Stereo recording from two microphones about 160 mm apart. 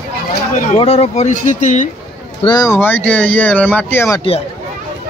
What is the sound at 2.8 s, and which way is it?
Speech, 10° left (ahead or behind).